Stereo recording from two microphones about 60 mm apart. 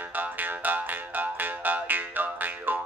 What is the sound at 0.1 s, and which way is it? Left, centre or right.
Music, right.